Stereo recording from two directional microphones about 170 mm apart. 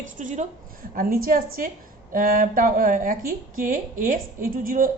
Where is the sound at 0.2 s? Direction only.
50° right (ahead or behind).